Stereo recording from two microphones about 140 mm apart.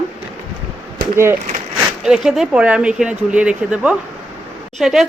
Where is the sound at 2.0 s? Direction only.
5° right (ahead or behind).